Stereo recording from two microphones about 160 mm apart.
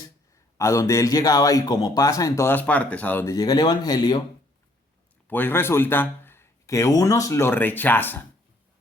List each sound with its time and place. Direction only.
0.5 s a man's voice: 20° left (ahead or behind)
3.3 s a man's voice: 25° left (ahead or behind)
5.3 s a man's voice: 15° left (ahead or behind)